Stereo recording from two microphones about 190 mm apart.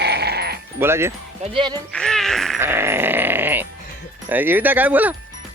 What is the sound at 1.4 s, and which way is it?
Speech, 30° right (ahead or behind).